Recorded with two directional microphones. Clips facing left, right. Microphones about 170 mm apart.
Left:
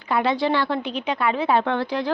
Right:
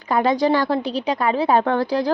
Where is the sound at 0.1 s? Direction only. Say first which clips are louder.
Right 3 dB; 40° right (ahead or behind).